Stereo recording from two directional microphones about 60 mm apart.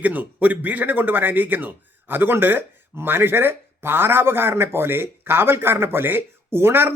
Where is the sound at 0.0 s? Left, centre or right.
Right.